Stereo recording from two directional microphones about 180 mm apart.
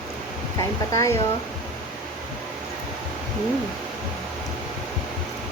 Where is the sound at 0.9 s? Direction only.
15° left (ahead or behind).